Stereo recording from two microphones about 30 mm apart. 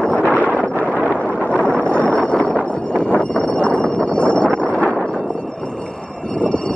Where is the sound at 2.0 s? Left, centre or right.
Left.